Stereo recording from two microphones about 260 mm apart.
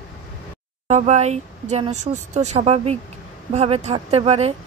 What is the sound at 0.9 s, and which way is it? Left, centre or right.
A woman's voice, right.